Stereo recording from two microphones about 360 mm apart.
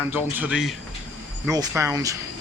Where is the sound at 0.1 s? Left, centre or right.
Centre.